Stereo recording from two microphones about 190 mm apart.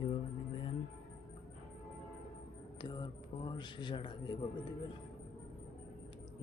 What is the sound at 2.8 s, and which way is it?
Speech, 25° left (ahead or behind).